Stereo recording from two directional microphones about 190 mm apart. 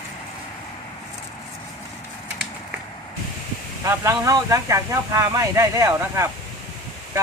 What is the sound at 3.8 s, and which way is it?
Speech, 15° right (ahead or behind).